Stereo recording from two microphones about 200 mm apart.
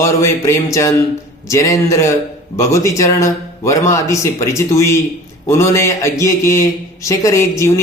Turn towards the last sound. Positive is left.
turn(degrees=15)  # may be behind; listen again after turning